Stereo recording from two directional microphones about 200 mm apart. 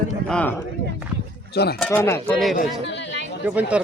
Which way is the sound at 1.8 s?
10° left (ahead or behind).